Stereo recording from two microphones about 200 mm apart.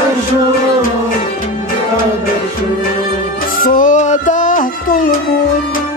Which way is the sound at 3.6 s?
40° left (ahead or behind).